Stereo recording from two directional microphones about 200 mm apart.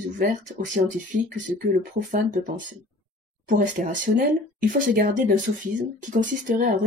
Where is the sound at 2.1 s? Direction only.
40° right (ahead or behind).